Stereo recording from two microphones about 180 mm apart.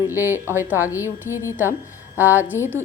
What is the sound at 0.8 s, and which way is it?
Speech, 15° left (ahead or behind).